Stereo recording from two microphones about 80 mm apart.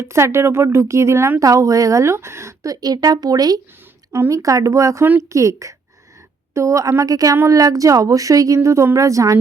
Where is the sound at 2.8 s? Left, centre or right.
Right.